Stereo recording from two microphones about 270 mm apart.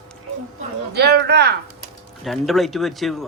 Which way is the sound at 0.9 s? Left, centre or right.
Right.